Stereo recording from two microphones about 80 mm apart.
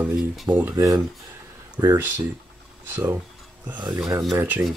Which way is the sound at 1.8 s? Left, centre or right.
Right.